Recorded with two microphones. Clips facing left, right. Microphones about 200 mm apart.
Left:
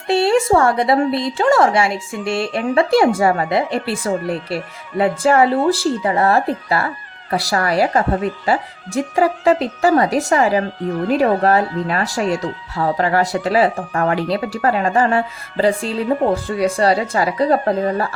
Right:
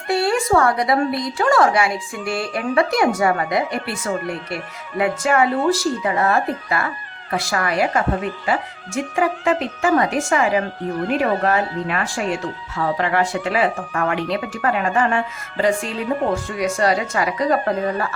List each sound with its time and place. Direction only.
0.1 s a woman's voice: 25° left (ahead or behind)